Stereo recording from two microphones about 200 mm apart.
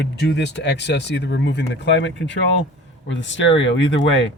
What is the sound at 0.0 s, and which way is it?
Speech, 60° left (ahead or behind).